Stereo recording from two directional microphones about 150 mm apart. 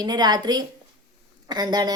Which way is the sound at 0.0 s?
25° right (ahead or behind).